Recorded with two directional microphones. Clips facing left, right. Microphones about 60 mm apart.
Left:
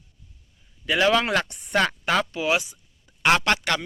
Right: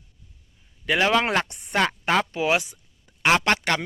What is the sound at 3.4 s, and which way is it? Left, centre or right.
Speech, right.